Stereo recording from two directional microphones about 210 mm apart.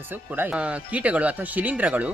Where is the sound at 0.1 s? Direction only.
10° right (ahead or behind).